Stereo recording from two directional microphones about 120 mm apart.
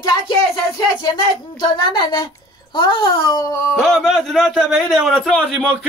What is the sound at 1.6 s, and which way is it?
A woman's voice, 40° left (ahead or behind).